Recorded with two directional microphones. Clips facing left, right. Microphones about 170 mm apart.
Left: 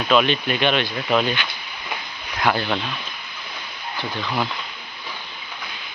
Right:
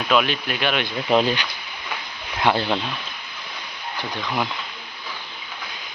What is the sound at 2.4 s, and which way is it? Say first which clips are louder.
Speech: right 1 dB; 25° right (ahead or behind).